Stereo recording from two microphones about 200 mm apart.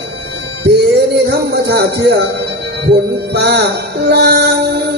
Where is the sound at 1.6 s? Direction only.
55° right (ahead or behind).